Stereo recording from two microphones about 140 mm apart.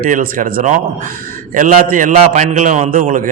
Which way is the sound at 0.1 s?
80° right.